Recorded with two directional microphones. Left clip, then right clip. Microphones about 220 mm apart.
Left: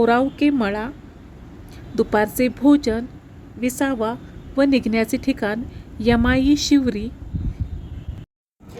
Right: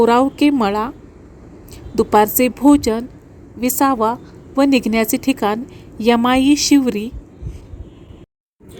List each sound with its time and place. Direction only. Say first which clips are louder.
0.0 s a woman's voice: right 4 dB; 15° right (ahead or behind)
2.0 s a woman's voice: right 6 dB; 15° right (ahead or behind)